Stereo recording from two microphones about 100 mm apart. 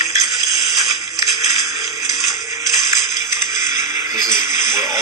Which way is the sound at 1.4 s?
35° right (ahead or behind).